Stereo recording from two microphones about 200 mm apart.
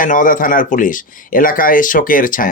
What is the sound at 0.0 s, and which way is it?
Speech, 40° left (ahead or behind).